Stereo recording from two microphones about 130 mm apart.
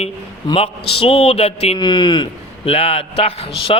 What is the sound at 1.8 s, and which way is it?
Speech, 35° left (ahead or behind).